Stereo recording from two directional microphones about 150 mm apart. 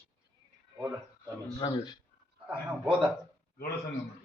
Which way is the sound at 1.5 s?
30° left (ahead or behind).